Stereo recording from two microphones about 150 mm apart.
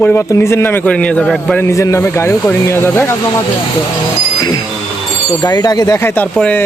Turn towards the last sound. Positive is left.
turn(degrees=10)  # may be behind; listen again after turning